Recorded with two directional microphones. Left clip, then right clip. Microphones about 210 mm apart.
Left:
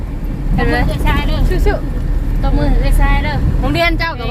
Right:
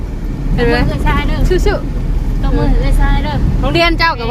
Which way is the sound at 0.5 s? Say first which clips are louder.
Right 3 dB; 35° right (ahead or behind).